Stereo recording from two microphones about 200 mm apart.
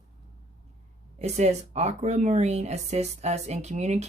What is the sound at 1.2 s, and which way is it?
Speech, 35° right (ahead or behind).